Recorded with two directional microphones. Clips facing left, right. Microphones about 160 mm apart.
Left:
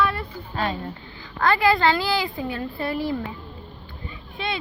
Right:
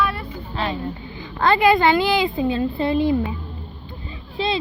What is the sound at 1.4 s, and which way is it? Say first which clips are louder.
A woman's voice: right 4 dB; 25° right (ahead or behind).